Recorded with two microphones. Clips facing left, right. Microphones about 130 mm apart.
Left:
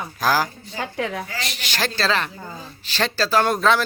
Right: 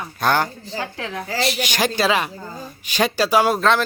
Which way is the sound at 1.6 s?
15° right (ahead or behind).